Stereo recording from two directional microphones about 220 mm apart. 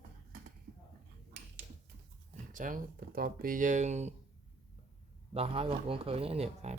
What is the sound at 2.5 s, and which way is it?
Speech, 35° right (ahead or behind).